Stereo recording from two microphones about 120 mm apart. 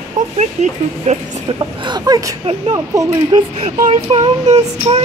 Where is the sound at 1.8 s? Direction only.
35° right (ahead or behind).